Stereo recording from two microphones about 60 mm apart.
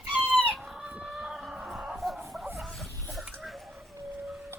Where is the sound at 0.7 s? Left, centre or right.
Centre.